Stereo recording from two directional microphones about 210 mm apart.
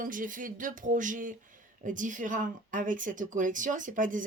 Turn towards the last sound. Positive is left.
turn(degrees=-40)  # may be behind; listen again after turning